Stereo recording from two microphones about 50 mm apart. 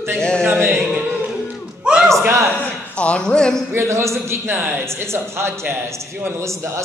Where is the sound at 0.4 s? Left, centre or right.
Right.